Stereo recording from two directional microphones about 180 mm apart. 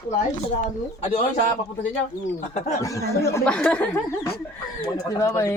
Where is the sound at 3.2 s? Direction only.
10° left (ahead or behind).